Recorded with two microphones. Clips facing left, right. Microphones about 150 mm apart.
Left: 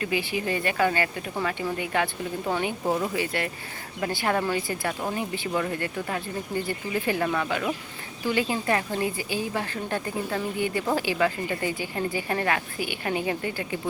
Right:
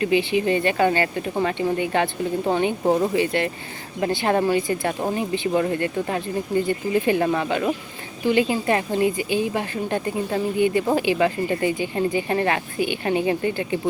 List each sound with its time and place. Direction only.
0.0 s a woman's voice: 20° right (ahead or behind)